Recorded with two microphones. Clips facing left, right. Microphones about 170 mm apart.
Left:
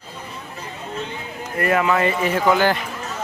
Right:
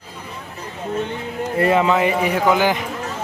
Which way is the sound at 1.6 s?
25° right (ahead or behind).